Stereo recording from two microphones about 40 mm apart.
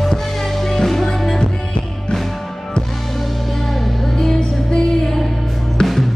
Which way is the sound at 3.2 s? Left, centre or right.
Centre.